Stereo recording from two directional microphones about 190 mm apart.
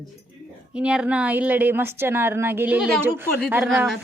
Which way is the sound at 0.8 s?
5° right (ahead or behind).